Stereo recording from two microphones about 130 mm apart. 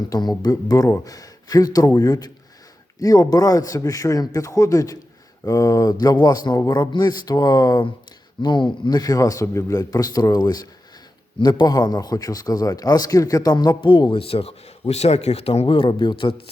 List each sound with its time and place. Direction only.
0.1 s a man's voice: 30° left (ahead or behind)